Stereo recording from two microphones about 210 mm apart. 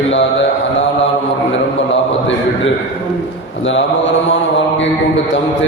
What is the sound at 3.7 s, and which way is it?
Mantra, 60° left (ahead or behind).